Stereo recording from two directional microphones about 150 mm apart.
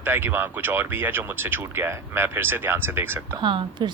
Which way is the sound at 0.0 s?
15° right (ahead or behind).